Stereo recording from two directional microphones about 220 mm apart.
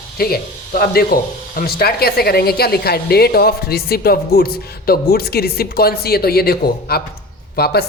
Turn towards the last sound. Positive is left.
turn(degrees=45)  # may be behind; listen again after turning